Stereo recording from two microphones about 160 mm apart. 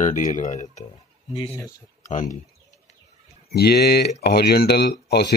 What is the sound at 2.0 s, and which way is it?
Speech, 50° left (ahead or behind).